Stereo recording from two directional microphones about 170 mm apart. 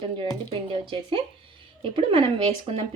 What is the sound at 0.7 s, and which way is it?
A woman's voice, 30° right (ahead or behind).